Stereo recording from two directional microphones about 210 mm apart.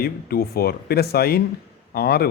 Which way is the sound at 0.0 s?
45° left (ahead or behind).